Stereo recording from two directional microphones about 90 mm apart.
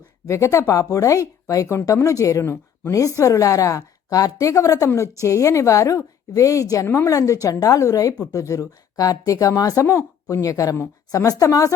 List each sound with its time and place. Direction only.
0.3 s a woman's voice: 35° left (ahead or behind)